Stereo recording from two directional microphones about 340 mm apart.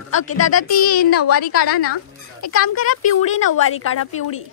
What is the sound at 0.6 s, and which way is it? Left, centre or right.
Speech, left.